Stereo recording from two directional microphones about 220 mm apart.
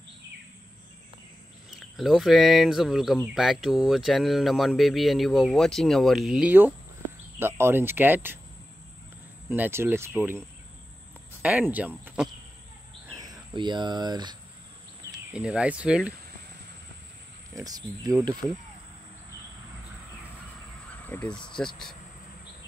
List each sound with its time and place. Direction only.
1.8 s speech: centre (ahead or behind)
9.5 s speech: 10° right (ahead or behind)
11.4 s speech: 5° right (ahead or behind)
13.1 s speech: 15° right (ahead or behind)
15.3 s speech: 5° right (ahead or behind)
17.6 s speech: 15° right (ahead or behind)
21.1 s speech: 5° left (ahead or behind)